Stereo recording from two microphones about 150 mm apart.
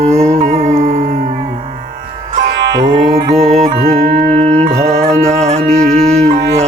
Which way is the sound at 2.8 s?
45° right (ahead or behind).